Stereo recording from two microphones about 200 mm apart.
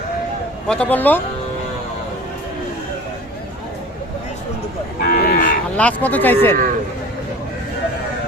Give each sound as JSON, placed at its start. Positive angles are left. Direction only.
{"t": 0.7, "sound": "speech", "side_deg": 10}
{"t": 5.0, "sound": "cattle", "side_deg": 45}
{"t": 5.7, "sound": "speech", "side_deg": 5}